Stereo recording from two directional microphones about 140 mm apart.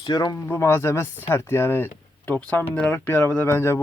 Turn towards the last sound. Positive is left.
turn(degrees=15)  # may be behind; listen again after turning